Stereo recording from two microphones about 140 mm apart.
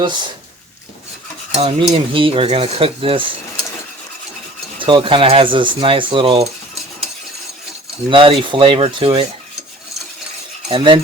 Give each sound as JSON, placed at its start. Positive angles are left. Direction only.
{"t": 1.5, "sound": "speech", "side_deg": -40}
{"t": 4.8, "sound": "speech", "side_deg": -35}
{"t": 8.1, "sound": "speech", "side_deg": -40}
{"t": 10.7, "sound": "speech", "side_deg": -35}